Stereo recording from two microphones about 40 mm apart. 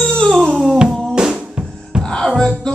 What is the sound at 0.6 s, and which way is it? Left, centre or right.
Music, right.